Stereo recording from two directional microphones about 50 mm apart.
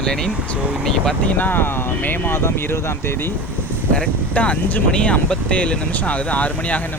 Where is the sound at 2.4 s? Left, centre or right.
Left.